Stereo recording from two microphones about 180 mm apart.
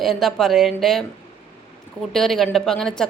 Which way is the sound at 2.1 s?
Centre (ahead or behind).